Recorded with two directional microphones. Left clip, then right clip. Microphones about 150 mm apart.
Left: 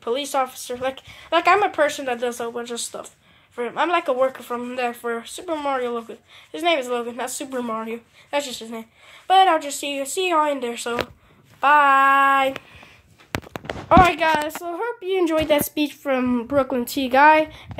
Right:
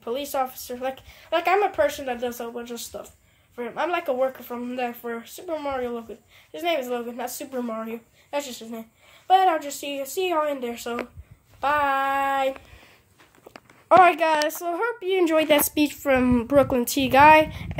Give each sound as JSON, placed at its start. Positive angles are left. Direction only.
{"t": 0.0, "sound": "speech", "side_deg": 40}
{"t": 11.6, "sound": "female singing", "side_deg": 20}
{"t": 13.8, "sound": "a woman's voice", "side_deg": -10}